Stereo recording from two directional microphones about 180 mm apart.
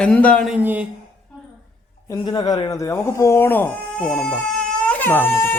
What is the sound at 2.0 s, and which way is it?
Speech, 20° left (ahead or behind).